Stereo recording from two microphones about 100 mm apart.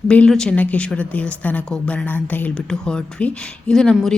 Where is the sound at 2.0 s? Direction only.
20° left (ahead or behind).